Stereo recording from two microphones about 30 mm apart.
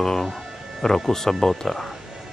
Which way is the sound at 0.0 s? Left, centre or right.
Centre.